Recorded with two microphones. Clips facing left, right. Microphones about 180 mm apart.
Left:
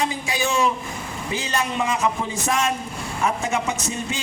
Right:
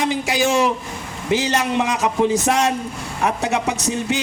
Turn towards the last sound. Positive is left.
turn(degrees=-70)  # may be behind; listen again after turning